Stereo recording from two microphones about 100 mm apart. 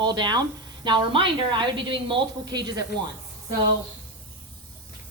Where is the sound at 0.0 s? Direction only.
45° right (ahead or behind).